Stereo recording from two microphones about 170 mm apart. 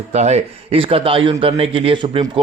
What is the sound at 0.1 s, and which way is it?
Speech, 40° right (ahead or behind).